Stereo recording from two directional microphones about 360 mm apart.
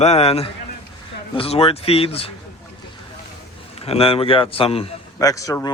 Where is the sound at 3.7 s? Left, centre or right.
Centre.